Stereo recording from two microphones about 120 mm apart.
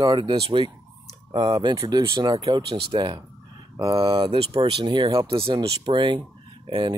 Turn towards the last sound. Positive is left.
turn(degrees=-45)  # may be behind; listen again after turning